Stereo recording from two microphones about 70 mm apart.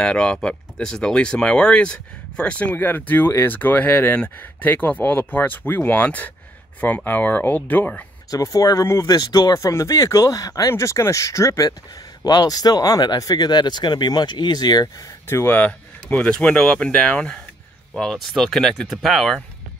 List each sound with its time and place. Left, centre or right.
0.0 s speech: centre
8.3 s speech: left
8.8 s speech: left
9.1 s speech: left
10.7 s speech: left
12.2 s speech: left
15.2 s speech: left
16.2 s speech: centre